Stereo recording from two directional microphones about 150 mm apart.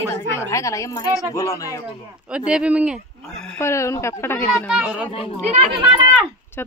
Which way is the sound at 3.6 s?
20° left (ahead or behind).